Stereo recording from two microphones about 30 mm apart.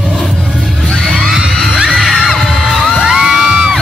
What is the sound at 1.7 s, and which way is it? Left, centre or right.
Music, right.